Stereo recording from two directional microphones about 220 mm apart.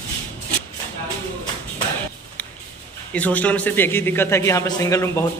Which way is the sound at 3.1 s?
5° left (ahead or behind).